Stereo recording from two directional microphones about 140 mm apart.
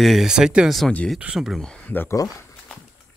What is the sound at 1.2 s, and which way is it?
Speech, 5° right (ahead or behind).